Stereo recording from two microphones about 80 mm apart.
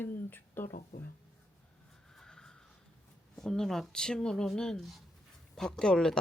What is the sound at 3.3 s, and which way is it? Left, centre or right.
Speech, centre.